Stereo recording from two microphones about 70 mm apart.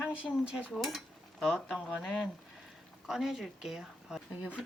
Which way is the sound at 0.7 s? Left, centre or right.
Centre.